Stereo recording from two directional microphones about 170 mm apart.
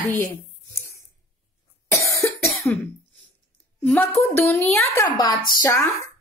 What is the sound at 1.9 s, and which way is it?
Cough, 15° left (ahead or behind).